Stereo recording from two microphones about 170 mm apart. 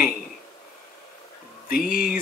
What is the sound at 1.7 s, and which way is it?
Speech, 55° left (ahead or behind).